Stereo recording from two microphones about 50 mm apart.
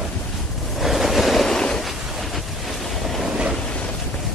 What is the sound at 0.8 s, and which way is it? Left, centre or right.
Waves, centre.